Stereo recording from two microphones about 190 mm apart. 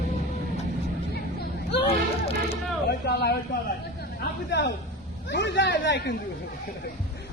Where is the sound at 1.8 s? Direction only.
30° left (ahead or behind).